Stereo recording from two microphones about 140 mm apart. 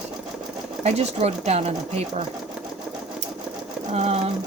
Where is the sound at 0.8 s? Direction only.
50° right (ahead or behind).